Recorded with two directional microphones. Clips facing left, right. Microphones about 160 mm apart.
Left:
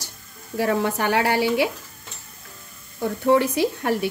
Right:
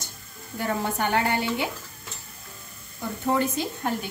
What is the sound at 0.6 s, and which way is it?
A woman's voice, 75° left (ahead or behind).